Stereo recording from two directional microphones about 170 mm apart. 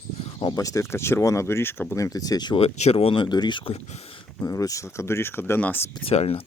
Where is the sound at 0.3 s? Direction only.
25° left (ahead or behind).